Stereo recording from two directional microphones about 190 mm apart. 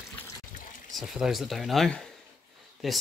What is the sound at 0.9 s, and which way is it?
Speech, centre (ahead or behind).